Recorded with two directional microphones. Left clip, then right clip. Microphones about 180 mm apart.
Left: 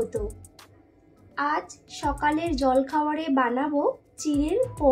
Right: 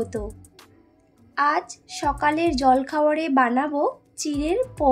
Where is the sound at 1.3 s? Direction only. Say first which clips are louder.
Right 5 dB; 35° right (ahead or behind).